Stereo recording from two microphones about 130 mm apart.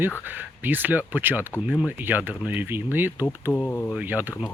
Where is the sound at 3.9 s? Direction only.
15° right (ahead or behind).